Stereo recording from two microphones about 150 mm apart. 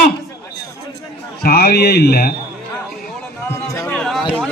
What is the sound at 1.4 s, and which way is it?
Speech, 90° left.